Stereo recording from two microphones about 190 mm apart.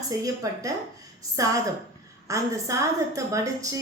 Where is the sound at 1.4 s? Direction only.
15° right (ahead or behind).